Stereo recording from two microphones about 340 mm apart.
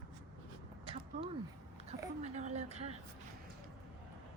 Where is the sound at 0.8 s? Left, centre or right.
Centre.